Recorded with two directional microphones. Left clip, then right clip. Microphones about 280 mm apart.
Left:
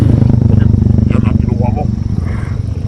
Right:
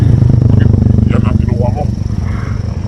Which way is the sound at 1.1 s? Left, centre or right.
Centre.